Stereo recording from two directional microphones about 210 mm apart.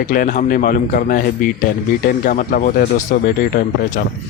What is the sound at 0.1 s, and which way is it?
Speech, 40° left (ahead or behind).